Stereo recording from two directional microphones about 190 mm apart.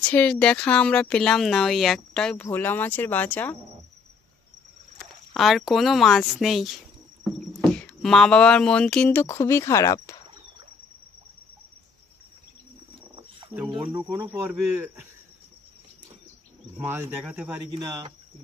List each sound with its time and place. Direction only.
0.1 s speech: 5° left (ahead or behind)
4.9 s speech: centre (ahead or behind); by 10.2 s 15° left (ahead or behind)
13.7 s speech: 10° right (ahead or behind)
16.7 s speech: 10° right (ahead or behind)